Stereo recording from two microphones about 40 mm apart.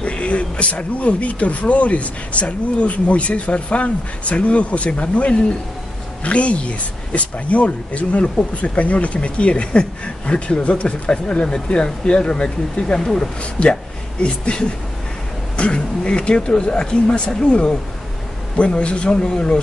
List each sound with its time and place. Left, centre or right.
0.0 s speech: left
11.1 s speech: left
13.4 s speech: left